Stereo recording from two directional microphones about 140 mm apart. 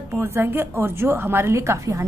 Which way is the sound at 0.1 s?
15° right (ahead or behind).